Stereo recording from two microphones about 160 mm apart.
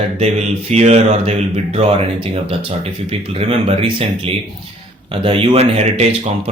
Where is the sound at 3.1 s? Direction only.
35° right (ahead or behind).